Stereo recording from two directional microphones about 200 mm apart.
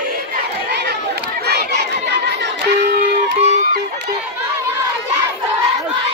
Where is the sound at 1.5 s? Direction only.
55° right (ahead or behind).